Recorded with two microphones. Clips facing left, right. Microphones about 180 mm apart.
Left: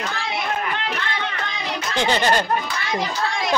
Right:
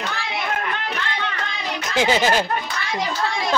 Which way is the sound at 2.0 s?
5° right (ahead or behind).